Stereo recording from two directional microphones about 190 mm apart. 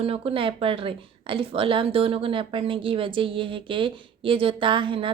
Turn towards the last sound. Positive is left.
turn(degrees=-25)  # may be behind; listen again after turning